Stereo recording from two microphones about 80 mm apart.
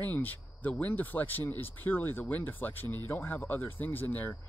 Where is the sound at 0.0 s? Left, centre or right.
Left.